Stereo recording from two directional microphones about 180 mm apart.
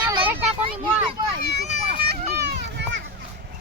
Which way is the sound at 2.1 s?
70° right (ahead or behind).